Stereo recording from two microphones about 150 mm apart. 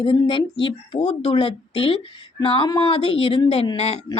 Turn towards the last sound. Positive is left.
turn(degrees=45)  # may be behind; listen again after turning